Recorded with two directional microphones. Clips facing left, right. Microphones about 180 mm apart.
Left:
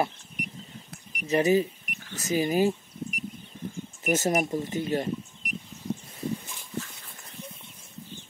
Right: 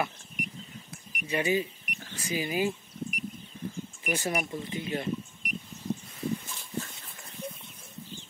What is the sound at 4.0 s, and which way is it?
Speech, 45° left (ahead or behind).